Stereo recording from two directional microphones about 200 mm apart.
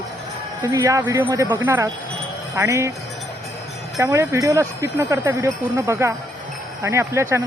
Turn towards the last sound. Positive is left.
turn(degrees=-15)  # may be behind; listen again after turning